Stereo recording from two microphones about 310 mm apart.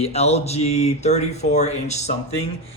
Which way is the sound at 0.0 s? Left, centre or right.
Centre.